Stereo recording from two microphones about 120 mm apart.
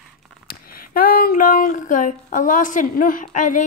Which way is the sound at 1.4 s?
90° left.